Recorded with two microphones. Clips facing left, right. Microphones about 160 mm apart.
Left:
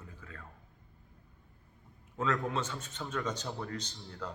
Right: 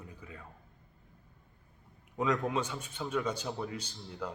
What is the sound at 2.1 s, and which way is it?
A man's voice, 15° right (ahead or behind).